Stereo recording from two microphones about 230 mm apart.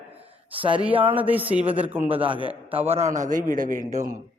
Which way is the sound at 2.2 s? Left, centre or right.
Right.